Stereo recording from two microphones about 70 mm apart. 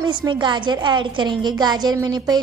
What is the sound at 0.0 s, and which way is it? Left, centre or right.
A woman's voice, right.